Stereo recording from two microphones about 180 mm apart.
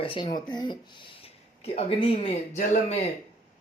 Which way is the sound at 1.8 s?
35° left (ahead or behind).